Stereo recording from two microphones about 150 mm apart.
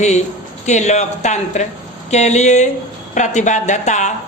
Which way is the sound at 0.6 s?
50° left (ahead or behind).